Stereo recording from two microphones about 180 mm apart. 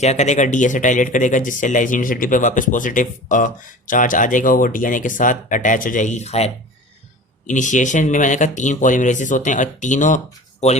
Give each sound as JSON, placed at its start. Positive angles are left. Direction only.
{"t": 0.0, "sound": "speech", "side_deg": 40}